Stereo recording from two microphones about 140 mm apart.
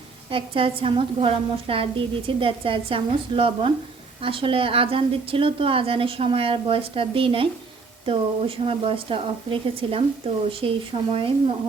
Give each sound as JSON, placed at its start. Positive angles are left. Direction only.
{"t": 0.3, "sound": "a woman's voice", "side_deg": -40}